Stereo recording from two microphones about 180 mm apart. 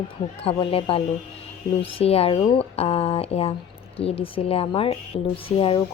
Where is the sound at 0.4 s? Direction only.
30° left (ahead or behind).